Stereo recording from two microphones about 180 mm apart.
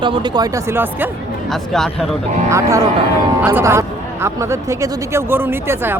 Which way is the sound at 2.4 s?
15° right (ahead or behind).